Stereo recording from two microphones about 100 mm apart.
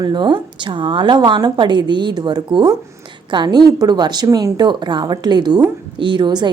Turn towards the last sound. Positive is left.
turn(degrees=-50)  # may be behind; listen again after turning